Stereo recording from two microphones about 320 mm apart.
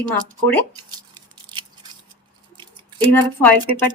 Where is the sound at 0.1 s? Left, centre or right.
Centre.